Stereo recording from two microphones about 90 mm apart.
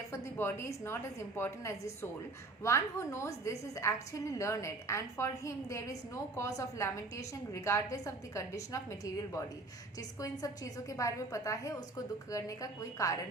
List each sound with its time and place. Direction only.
0.1 s a woman's voice: 30° left (ahead or behind)